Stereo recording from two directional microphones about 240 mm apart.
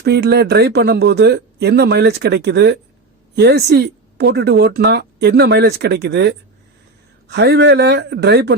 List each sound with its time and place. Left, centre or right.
0.0 s a woman's voice: right